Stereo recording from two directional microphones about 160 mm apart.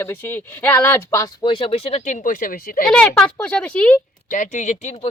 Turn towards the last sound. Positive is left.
turn(degrees=45)  # may be behind; listen again after turning